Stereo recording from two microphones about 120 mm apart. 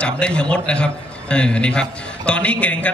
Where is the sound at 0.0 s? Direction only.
10° left (ahead or behind).